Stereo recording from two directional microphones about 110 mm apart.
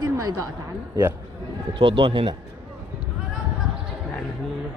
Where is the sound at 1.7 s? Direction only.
45° right (ahead or behind).